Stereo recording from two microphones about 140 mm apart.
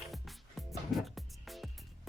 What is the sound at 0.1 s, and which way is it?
Music, centre (ahead or behind).